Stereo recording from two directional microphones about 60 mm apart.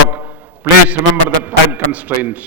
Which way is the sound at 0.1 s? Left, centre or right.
Right.